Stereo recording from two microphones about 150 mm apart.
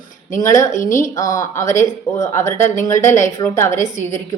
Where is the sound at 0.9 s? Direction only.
20° left (ahead or behind).